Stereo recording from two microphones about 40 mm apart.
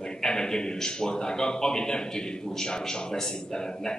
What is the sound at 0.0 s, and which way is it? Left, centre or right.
A man's voice, centre.